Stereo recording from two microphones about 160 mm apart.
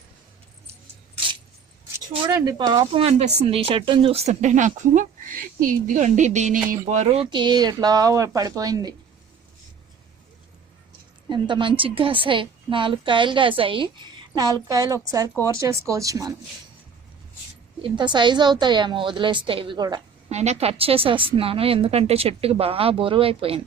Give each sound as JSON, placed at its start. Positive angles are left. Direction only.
{"t": 0.7, "sound": "keys jangling", "side_deg": -35}
{"t": 2.2, "sound": "a woman's voice", "side_deg": -25}
{"t": 3.0, "sound": "speech", "side_deg": -40}
{"t": 7.1, "sound": "a woman's voice", "side_deg": -35}
{"t": 11.3, "sound": "a woman's voice", "side_deg": -30}
{"t": 17.8, "sound": "a woman's voice", "side_deg": -30}
{"t": 20.3, "sound": "a woman's voice", "side_deg": -45}